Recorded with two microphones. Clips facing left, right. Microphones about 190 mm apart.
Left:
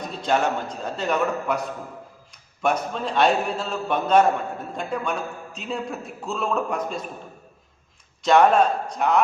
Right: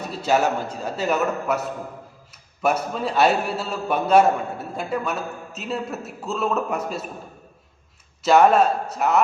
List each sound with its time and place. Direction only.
0.1 s a man's voice: 5° right (ahead or behind)
8.2 s a man's voice: 5° right (ahead or behind)